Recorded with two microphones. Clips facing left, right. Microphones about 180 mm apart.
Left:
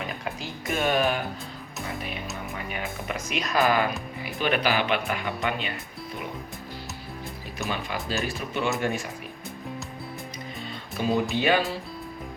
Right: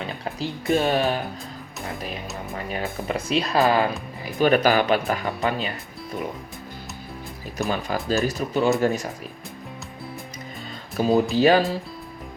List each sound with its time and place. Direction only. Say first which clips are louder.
0.3 s speech: right 9 dB; 35° right (ahead or behind)
2.6 s speech: right 7 dB; 35° right (ahead or behind)
4.4 s speech: right 7 dB; 40° right (ahead or behind)
7.7 s speech: right 6 dB; 40° right (ahead or behind)
10.9 s speech: right 6 dB; 40° right (ahead or behind)